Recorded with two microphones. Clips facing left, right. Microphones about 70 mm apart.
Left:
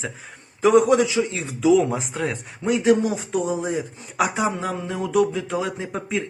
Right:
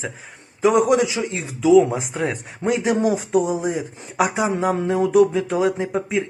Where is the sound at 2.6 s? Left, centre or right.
Right.